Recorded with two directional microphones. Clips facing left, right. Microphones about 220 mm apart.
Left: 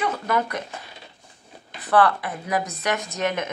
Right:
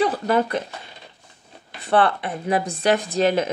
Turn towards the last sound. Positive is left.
turn(degrees=-30)  # may be behind; listen again after turning